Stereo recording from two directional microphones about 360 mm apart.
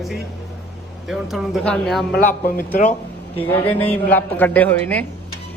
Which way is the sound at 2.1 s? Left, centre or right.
Left.